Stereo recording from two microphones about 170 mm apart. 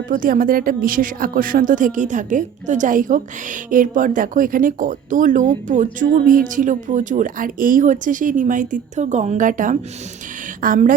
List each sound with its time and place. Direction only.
0.1 s a woman's voice: 55° right (ahead or behind)